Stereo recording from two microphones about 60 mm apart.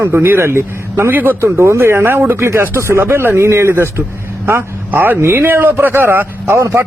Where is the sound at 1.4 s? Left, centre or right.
Right.